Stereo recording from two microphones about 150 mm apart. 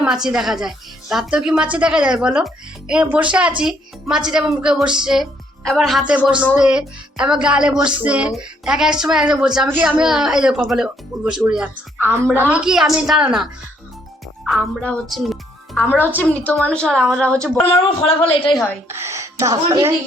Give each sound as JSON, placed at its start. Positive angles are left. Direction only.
{"t": 0.0, "sound": "a woman's voice", "side_deg": -5}
{"t": 16.0, "sound": "a woman's voice", "side_deg": 10}
{"t": 18.3, "sound": "a woman's voice", "side_deg": 35}
{"t": 18.9, "sound": "a woman's voice", "side_deg": -20}